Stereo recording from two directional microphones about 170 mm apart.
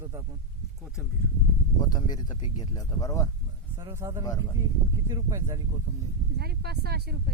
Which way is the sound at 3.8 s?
15° right (ahead or behind).